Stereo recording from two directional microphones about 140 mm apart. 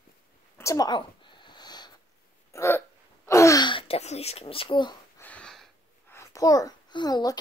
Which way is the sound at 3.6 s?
40° left (ahead or behind).